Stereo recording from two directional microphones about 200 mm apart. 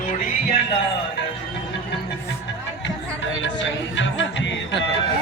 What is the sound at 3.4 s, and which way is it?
Music, 65° left (ahead or behind).